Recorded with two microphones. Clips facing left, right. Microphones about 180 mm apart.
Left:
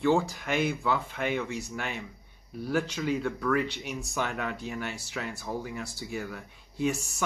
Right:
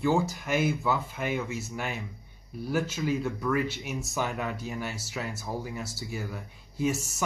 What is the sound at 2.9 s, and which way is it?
Speech, 5° right (ahead or behind).